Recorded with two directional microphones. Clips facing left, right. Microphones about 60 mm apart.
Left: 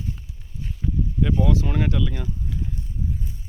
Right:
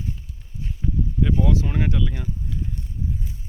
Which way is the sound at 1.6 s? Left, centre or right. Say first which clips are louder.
Left 1 dB; centre.